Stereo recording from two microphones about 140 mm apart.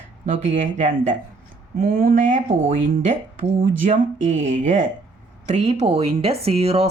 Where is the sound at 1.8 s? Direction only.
90° right.